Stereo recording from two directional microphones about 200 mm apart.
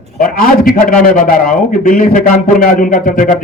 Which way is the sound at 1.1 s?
45° left (ahead or behind).